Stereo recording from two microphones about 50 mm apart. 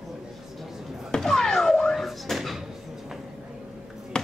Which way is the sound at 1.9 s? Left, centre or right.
Centre.